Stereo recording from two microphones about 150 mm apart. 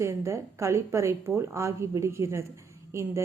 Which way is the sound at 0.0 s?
20° right (ahead or behind).